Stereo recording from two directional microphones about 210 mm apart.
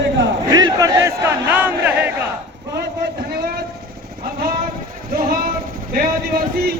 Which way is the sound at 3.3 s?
50° right (ahead or behind).